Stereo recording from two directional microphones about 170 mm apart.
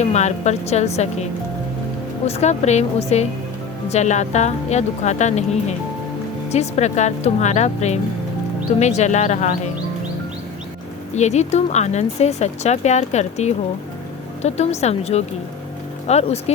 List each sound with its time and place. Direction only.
0.0 s speech: 40° left (ahead or behind)
11.1 s speech: 40° left (ahead or behind)